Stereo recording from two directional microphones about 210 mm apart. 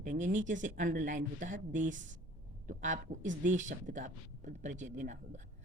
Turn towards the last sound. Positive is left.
turn(degrees=-40)  # may be behind; listen again after turning